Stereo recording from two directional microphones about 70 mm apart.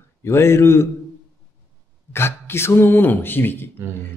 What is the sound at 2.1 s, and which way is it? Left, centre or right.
Speech, left.